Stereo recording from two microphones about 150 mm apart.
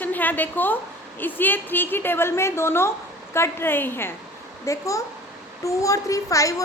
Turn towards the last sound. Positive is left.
turn(degrees=20)  # may be behind; listen again after turning